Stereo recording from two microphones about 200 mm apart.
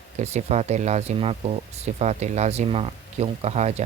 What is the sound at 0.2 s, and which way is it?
Speech, 35° right (ahead or behind).